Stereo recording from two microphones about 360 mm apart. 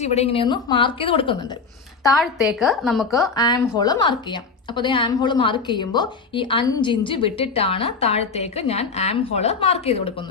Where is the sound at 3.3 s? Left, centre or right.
Centre.